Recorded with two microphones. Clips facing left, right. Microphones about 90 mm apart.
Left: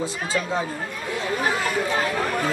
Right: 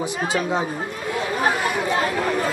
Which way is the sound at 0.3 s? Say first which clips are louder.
Right 2 dB; 20° right (ahead or behind).